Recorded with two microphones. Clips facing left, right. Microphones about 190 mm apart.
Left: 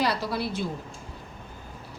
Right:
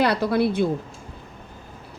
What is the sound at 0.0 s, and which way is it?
Speech, 60° right (ahead or behind).